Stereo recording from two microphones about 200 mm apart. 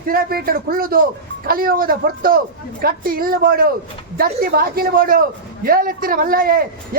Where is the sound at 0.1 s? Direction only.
50° right (ahead or behind).